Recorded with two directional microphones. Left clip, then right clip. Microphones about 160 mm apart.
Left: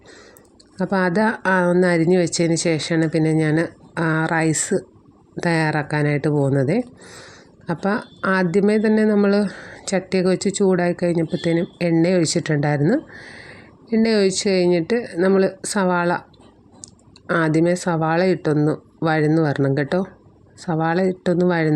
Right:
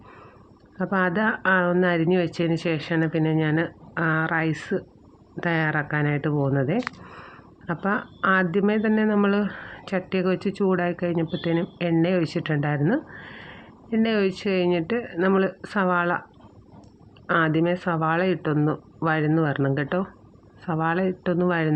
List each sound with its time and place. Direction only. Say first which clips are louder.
0.8 s speech: left 4 dB; 45° left (ahead or behind)
6.3 s speech: left 5 dB; 25° left (ahead or behind); by 16.2 s 45° left (ahead or behind)
17.2 s speech: left 3 dB; 45° left (ahead or behind)